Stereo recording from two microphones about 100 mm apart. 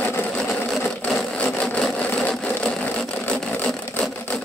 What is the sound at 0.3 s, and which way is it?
Sewing machine, 5° left (ahead or behind).